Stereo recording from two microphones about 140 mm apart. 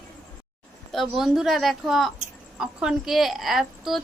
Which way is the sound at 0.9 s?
5° right (ahead or behind).